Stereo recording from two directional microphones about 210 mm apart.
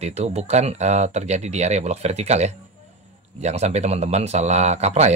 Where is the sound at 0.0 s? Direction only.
30° right (ahead or behind).